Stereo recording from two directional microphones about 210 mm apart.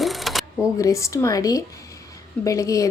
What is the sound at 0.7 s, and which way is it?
Speech, 15° left (ahead or behind).